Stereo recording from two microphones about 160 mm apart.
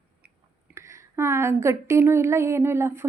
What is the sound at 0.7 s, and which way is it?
A woman's voice, 15° right (ahead or behind).